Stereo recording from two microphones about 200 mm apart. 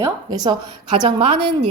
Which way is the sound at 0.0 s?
20° right (ahead or behind).